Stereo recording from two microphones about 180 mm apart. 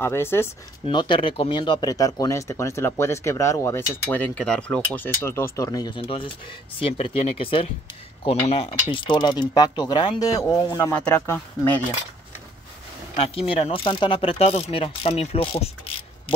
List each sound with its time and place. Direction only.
0.0 s speech: 15° left (ahead or behind)
0.8 s speech: 25° left (ahead or behind)
10.9 s speech: 10° left (ahead or behind)
13.2 s speech: 30° left (ahead or behind)